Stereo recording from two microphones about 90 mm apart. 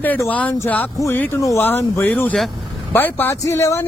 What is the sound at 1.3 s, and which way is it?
A man's voice, 35° left (ahead or behind).